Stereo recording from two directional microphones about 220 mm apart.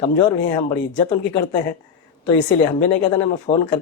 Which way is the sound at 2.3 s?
15° left (ahead or behind).